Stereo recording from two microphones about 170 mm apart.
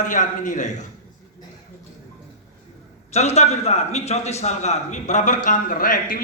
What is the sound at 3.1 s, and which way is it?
A man's voice, 40° left (ahead or behind).